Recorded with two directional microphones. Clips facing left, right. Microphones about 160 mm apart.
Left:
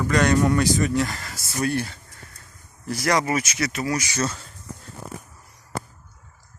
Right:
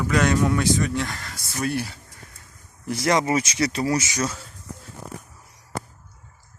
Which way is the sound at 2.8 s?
25° right (ahead or behind).